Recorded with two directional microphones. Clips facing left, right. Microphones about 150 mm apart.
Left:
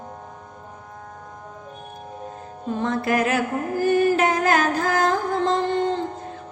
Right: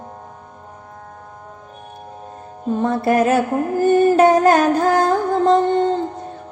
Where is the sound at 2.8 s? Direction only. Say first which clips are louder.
Right 6 dB; 30° right (ahead or behind).